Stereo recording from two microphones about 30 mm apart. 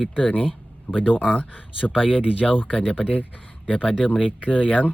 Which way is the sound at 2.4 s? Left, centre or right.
Centre.